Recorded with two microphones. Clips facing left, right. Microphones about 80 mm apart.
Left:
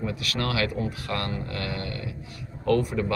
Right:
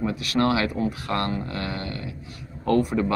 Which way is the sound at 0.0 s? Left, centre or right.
Right.